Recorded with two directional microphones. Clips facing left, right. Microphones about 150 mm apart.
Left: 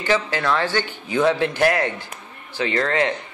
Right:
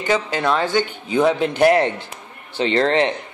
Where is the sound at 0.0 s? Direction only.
15° right (ahead or behind).